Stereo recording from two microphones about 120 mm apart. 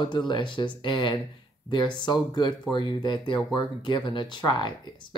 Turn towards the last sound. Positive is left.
turn(degrees=40)  # may be behind; listen again after turning